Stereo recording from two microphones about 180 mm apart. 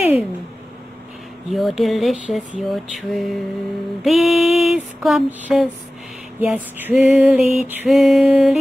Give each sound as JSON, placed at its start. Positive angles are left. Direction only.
{"t": 0.0, "sound": "cat", "side_deg": -5}
{"t": 1.5, "sound": "music", "side_deg": 0}